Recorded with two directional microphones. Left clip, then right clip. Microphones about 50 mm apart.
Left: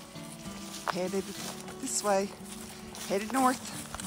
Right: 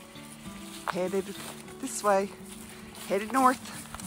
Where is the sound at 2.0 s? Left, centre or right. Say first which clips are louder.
Right 3 dB; left.